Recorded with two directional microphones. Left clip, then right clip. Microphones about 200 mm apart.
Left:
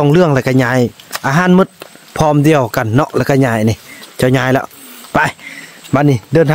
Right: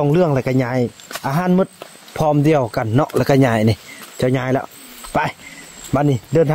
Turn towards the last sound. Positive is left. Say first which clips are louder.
# left 4 dB
turn(degrees=25)  # may be behind; listen again after turning